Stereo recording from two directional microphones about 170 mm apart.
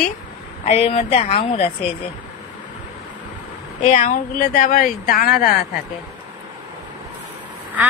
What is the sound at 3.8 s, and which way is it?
Speech, 45° left (ahead or behind).